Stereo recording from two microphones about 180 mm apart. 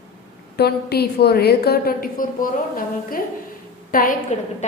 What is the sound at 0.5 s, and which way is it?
A woman's voice, 60° left (ahead or behind).